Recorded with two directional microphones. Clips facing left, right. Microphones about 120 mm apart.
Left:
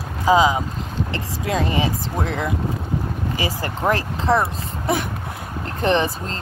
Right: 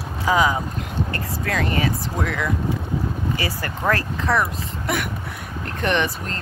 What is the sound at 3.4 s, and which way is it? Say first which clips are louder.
Speech: left 2 dB; 20° left (ahead or behind).